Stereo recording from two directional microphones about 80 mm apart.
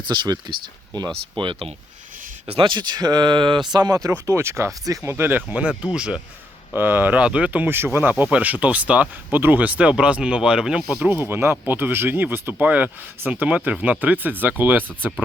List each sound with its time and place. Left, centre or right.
0.1 s speech: right
2.6 s speech: right
3.7 s speech: right
4.3 s speech: right
5.5 s speech: centre
6.7 s speech: right; by 10.8 s centre
11.0 s speech: right